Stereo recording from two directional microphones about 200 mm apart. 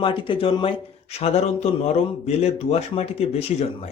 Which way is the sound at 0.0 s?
25° left (ahead or behind).